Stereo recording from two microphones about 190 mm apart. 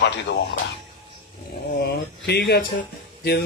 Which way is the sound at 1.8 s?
60° left (ahead or behind).